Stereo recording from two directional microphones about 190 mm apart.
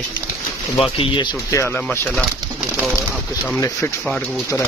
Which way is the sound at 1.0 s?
25° left (ahead or behind).